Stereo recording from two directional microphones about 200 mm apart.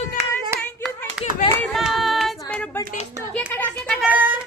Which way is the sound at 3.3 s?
5° left (ahead or behind).